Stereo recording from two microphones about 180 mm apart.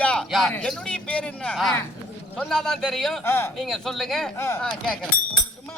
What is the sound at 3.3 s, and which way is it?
Speech, 15° left (ahead or behind).